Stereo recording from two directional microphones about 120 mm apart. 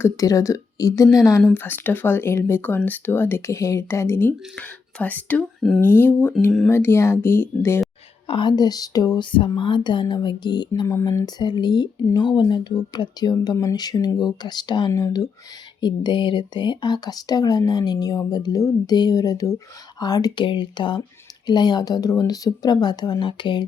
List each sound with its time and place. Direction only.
0.0 s speech: 25° left (ahead or behind)
1.5 s speech: 15° left (ahead or behind)
5.5 s speech: centre (ahead or behind)
5.8 s speech: 15° left (ahead or behind)
8.3 s speech: 40° left (ahead or behind)
9.3 s speech: 45° left (ahead or behind)